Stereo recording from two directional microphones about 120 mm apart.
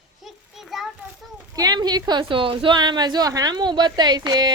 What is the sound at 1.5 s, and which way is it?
A woman's voice, 30° right (ahead or behind).